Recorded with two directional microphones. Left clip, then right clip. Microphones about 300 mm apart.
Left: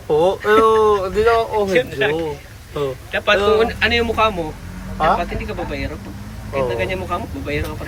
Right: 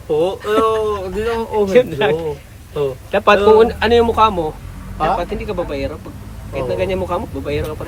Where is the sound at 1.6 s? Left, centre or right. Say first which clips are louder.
Right 4 dB; centre.